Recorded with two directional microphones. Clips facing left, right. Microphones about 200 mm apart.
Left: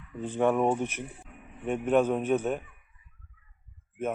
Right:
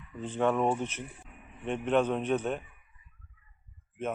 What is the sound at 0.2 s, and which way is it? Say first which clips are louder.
Speech: left 3 dB; 10° left (ahead or behind).